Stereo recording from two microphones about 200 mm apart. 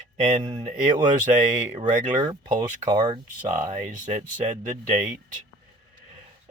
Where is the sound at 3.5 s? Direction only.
35° right (ahead or behind).